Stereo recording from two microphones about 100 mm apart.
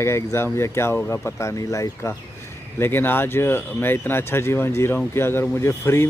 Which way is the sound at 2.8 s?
20° left (ahead or behind).